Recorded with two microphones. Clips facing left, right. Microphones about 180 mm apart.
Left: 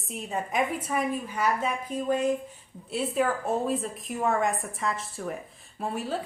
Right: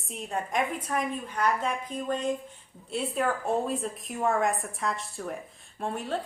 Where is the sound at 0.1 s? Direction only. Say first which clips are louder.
Even; centre (ahead or behind).